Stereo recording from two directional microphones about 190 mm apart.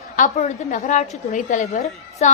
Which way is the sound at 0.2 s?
40° left (ahead or behind).